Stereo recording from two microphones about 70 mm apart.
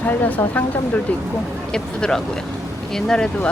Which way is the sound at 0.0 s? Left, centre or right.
Left.